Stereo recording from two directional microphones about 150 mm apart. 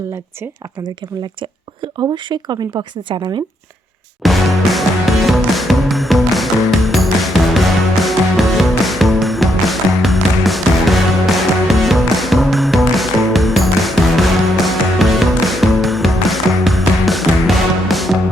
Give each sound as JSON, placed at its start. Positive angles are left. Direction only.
{"t": 1.4, "sound": "a woman's voice", "side_deg": -30}
{"t": 4.2, "sound": "music", "side_deg": 0}